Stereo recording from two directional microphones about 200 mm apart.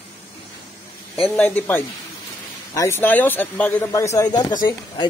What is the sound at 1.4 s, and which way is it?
Speech, 10° left (ahead or behind).